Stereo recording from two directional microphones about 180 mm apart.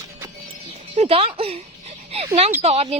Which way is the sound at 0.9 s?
35° right (ahead or behind).